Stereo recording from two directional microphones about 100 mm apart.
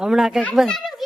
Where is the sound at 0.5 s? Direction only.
5° left (ahead or behind).